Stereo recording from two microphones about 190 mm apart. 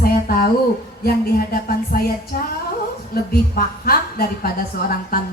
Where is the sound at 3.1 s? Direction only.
55° left (ahead or behind).